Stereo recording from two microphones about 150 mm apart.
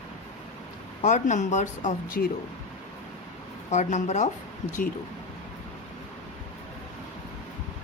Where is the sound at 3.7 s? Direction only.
50° left (ahead or behind).